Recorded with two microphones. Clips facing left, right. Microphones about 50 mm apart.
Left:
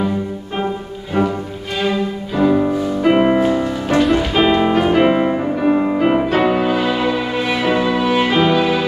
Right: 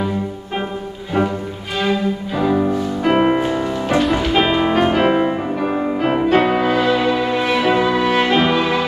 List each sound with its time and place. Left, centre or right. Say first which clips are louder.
2.3 s music: left 3 dB; centre